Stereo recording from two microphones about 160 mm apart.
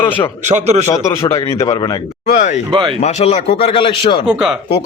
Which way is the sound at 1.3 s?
20° left (ahead or behind).